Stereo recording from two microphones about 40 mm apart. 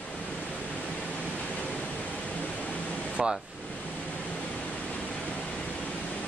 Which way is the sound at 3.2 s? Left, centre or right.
Centre.